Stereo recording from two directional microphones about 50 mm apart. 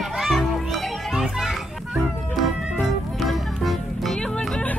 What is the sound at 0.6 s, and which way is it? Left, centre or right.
Children playing, centre.